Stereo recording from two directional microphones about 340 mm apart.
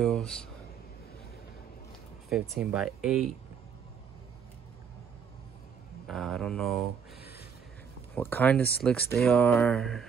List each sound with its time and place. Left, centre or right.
0.0 s speech: centre
2.5 s speech: centre
6.0 s speech: centre
7.2 s a sound: left
8.1 s speech: centre